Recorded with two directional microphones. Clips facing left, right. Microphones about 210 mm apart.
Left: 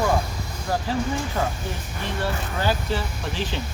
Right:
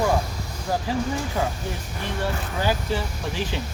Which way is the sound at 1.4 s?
15° right (ahead or behind).